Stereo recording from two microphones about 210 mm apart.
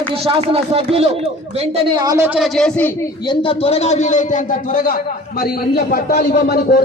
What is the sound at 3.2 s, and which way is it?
A man's voice, 25° left (ahead or behind).